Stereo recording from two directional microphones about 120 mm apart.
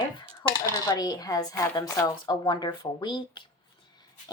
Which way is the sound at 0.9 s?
35° left (ahead or behind).